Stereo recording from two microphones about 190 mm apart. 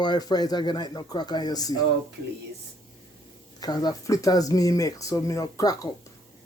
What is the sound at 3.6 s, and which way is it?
Speech, 20° left (ahead or behind).